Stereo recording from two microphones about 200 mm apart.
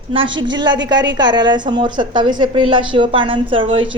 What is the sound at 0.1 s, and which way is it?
A woman's voice, 25° right (ahead or behind).